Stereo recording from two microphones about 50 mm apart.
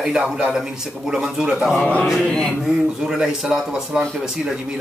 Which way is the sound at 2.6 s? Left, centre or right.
Centre.